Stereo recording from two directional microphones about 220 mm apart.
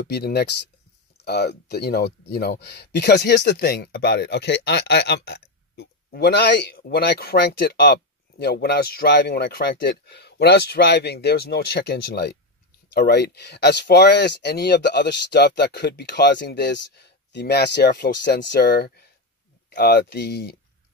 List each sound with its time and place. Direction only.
0.0 s speech: 45° left (ahead or behind)